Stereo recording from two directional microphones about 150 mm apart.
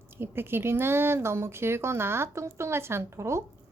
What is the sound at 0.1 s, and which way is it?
Speech, 15° right (ahead or behind).